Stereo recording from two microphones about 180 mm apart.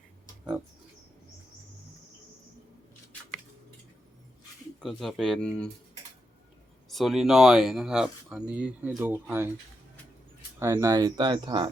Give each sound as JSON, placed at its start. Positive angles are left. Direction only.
{"t": 4.8, "sound": "speech", "side_deg": 0}
{"t": 6.8, "sound": "speech", "side_deg": 0}
{"t": 10.6, "sound": "speech", "side_deg": -15}